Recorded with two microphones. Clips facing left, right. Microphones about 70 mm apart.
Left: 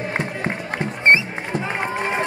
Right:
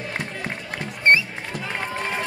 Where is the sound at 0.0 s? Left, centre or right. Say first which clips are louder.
Left 5 dB; left.